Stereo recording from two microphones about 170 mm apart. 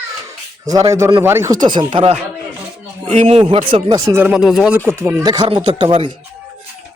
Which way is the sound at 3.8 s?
20° right (ahead or behind).